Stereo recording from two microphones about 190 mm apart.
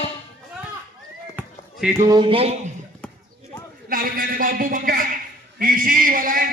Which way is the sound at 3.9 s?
50° right (ahead or behind).